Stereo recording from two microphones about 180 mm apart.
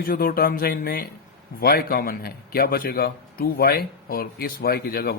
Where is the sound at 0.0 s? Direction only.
55° left (ahead or behind).